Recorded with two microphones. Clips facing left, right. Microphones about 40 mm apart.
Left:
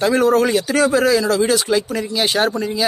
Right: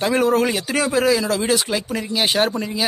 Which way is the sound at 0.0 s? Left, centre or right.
Centre.